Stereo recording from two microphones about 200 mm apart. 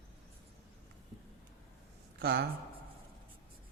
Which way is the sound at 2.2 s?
55° right (ahead or behind).